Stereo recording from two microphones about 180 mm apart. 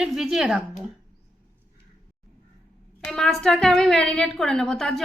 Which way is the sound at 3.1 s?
Centre (ahead or behind).